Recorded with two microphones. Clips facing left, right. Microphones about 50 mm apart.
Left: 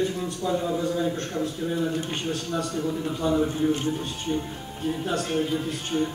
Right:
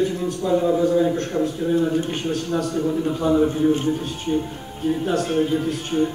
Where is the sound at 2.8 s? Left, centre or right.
Right.